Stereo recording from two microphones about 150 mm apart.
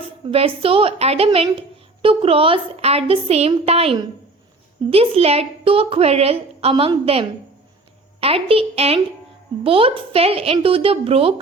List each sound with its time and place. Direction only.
0.3 s a woman's voice: 40° right (ahead or behind)